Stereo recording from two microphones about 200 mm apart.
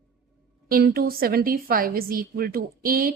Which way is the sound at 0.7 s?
50° right (ahead or behind).